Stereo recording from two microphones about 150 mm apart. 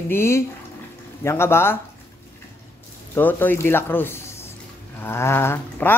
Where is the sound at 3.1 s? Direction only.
15° left (ahead or behind).